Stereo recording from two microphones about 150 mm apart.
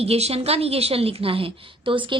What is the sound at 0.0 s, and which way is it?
A woman's voice, 45° right (ahead or behind).